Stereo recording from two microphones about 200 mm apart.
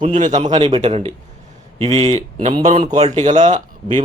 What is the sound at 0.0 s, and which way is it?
Speech, 40° right (ahead or behind).